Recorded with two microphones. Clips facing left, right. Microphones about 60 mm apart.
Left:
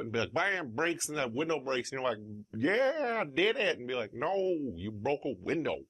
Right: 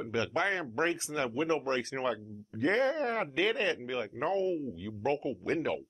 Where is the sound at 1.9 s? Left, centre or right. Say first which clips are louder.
Even; centre.